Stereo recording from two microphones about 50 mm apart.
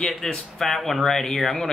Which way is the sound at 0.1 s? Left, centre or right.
Centre.